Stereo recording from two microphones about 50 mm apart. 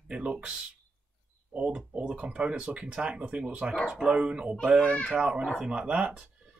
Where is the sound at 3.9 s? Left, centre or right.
Centre.